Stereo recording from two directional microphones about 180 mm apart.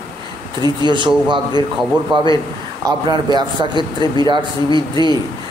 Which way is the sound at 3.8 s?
25° left (ahead or behind).